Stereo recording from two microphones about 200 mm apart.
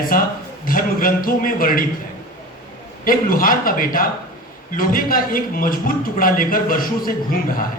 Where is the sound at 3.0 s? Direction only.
45° left (ahead or behind).